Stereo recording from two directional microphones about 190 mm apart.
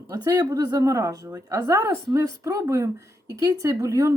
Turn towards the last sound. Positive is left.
turn(degrees=-15)  # may be behind; listen again after turning